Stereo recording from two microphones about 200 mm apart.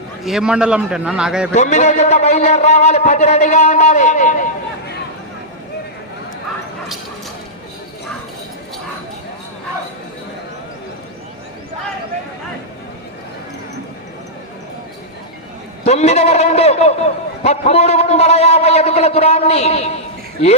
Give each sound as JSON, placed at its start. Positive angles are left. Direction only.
{"t": 0.3, "sound": "a man's voice", "side_deg": -5}
{"t": 1.5, "sound": "a man's voice", "side_deg": 35}
{"t": 15.8, "sound": "a man's voice", "side_deg": 35}